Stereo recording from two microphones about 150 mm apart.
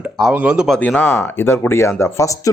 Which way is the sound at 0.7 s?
10° left (ahead or behind).